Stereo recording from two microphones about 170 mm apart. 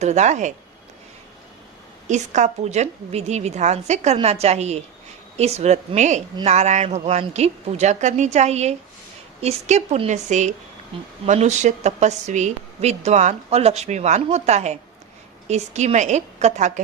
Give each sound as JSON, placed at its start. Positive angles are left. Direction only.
{"t": 0.0, "sound": "a woman's voice", "side_deg": -45}
{"t": 2.0, "sound": "a woman's voice", "side_deg": -45}